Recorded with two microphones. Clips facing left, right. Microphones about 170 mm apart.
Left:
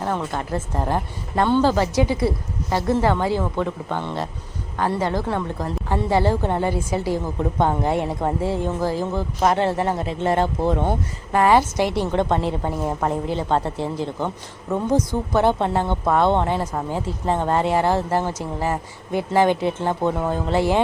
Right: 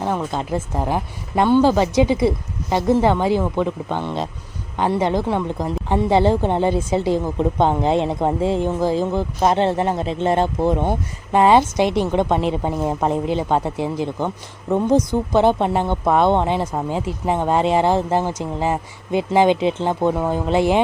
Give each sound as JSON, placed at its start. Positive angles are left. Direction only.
{"t": 0.0, "sound": "a woman's voice", "side_deg": -15}